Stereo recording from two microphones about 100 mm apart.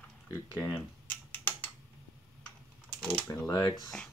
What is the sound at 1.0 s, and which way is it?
Typing, 15° left (ahead or behind).